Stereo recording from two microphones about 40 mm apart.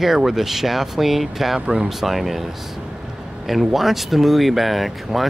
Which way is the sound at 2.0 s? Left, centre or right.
Centre.